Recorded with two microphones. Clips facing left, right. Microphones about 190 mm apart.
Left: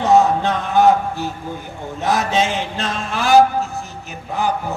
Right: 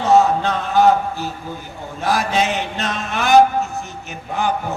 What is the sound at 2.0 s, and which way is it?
A man's voice, 25° left (ahead or behind).